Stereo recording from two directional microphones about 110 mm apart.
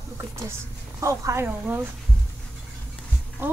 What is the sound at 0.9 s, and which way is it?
Speech, 30° right (ahead or behind).